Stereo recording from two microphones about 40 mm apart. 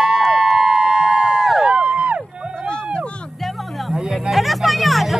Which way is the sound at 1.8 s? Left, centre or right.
Right.